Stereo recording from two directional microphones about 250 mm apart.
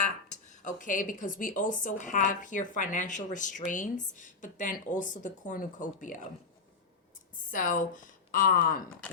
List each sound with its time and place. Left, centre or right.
0.3 s speech: left
7.5 s speech: left